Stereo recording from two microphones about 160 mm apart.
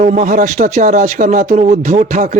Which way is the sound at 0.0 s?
50° right (ahead or behind).